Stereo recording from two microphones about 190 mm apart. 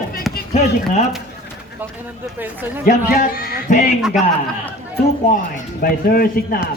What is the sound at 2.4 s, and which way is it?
Speech, 10° right (ahead or behind).